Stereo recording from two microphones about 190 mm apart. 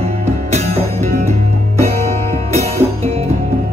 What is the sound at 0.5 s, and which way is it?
Music, 35° right (ahead or behind).